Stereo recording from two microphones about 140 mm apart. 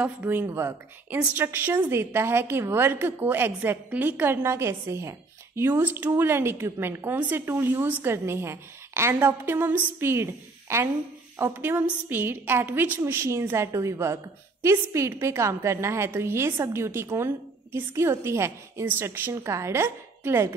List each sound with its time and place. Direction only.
0.0 s a woman's voice: 10° right (ahead or behind)